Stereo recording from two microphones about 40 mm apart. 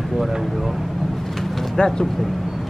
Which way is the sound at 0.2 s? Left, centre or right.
Centre.